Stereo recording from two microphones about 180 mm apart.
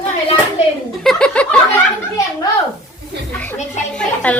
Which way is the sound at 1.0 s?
5° left (ahead or behind).